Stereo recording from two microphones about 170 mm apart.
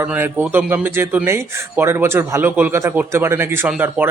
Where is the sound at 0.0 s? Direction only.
10° right (ahead or behind).